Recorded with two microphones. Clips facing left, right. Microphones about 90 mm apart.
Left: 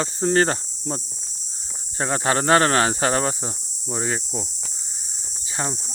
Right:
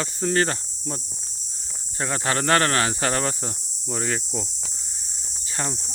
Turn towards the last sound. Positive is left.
turn(degrees=15)  # may be behind; listen again after turning